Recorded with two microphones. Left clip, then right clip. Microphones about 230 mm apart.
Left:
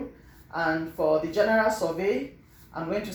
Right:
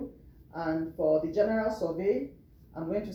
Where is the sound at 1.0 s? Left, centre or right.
Left.